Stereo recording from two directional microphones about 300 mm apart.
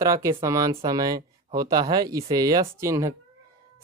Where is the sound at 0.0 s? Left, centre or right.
Centre.